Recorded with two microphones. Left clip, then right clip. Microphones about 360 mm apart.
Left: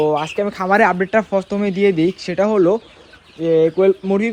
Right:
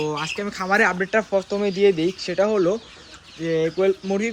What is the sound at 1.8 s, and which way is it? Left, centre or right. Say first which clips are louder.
Speech: left 3 dB; centre.